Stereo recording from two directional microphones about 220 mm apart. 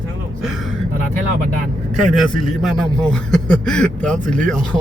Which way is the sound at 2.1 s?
Centre (ahead or behind).